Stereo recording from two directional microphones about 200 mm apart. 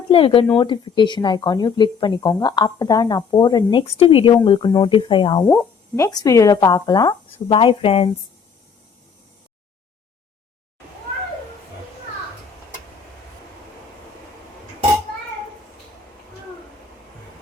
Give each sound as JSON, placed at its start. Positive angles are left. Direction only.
{"t": 0.1, "sound": "speech", "side_deg": 25}
{"t": 5.4, "sound": "speech", "side_deg": 5}
{"t": 6.0, "sound": "speech", "side_deg": 20}